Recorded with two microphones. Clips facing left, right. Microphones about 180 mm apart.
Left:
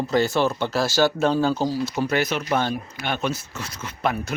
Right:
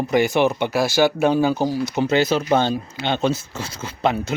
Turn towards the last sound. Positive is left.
turn(degrees=-25)  # may be behind; listen again after turning